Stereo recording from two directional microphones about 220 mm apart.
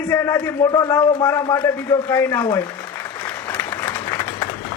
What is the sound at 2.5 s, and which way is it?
Applause, 5° left (ahead or behind).